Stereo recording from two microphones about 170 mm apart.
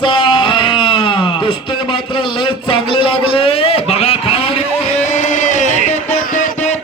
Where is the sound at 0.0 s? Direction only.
30° left (ahead or behind).